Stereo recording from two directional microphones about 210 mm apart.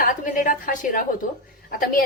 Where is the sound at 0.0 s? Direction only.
40° left (ahead or behind).